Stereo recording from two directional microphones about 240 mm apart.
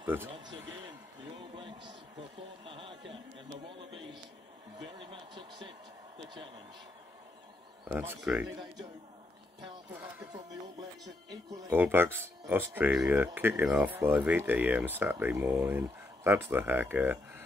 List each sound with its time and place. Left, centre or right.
0.0 s speech: centre
0.7 s a sound: centre
3.6 s speech: right
7.8 s speech: centre
9.9 s speech: centre